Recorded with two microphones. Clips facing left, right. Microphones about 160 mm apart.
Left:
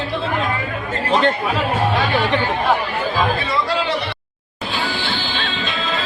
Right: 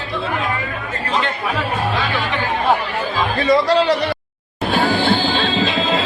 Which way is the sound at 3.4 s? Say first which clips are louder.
Right 7 dB; 40° right (ahead or behind).